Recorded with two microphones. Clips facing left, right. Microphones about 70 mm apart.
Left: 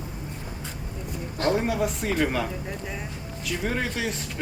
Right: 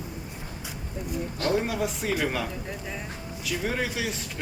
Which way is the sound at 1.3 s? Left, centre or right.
Left.